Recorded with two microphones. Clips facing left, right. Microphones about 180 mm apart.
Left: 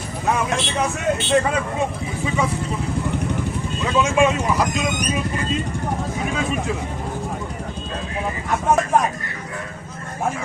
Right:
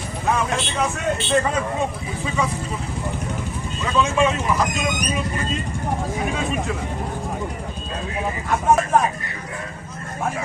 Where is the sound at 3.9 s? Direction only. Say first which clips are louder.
Left 2 dB; 10° left (ahead or behind).